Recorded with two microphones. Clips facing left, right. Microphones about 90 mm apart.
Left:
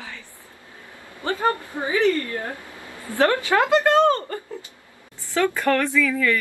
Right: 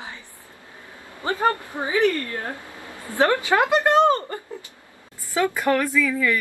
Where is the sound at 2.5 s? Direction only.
20° right (ahead or behind).